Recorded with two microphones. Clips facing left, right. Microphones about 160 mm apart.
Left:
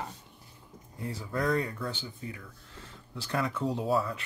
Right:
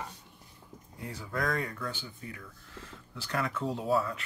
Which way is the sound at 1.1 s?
25° left (ahead or behind).